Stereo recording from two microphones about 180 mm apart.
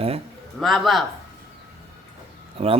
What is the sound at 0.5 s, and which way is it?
Speech, centre (ahead or behind).